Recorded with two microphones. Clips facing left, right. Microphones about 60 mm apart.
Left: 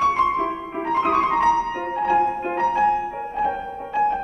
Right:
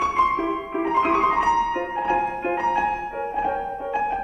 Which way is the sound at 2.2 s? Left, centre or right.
Right.